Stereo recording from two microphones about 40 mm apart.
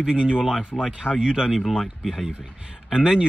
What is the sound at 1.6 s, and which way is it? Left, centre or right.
Speech, centre.